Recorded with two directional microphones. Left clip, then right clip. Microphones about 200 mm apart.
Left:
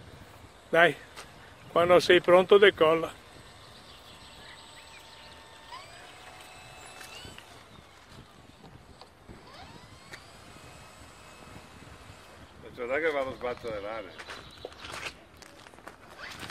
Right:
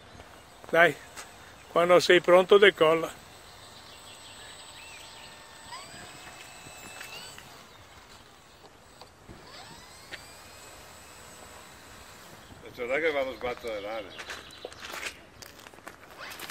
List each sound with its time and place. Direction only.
0.7 s speech: 5° left (ahead or behind)
12.7 s a sound: 25° left (ahead or behind)
14.1 s walk: centre (ahead or behind)